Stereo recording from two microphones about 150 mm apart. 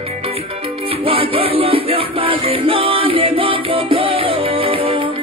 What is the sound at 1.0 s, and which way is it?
Music, 35° right (ahead or behind).